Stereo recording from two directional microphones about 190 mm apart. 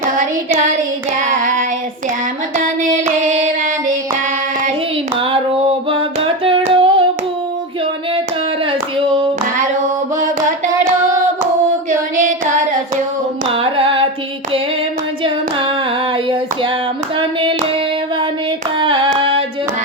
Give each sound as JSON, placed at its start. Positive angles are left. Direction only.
{"t": 0.5, "sound": "child singing", "side_deg": -40}
{"t": 2.9, "sound": "a sound", "side_deg": -40}
{"t": 5.9, "sound": "a sound", "side_deg": -30}
{"t": 11.9, "sound": "singing", "side_deg": -45}
{"t": 13.5, "sound": "carnatic music", "side_deg": -30}
{"t": 18.8, "sound": "hands", "side_deg": -25}